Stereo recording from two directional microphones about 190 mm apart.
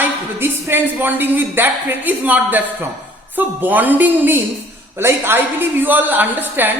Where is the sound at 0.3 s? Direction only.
10° right (ahead or behind).